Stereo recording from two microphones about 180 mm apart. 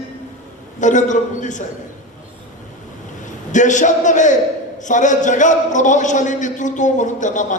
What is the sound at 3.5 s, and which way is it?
A man's voice, 45° left (ahead or behind).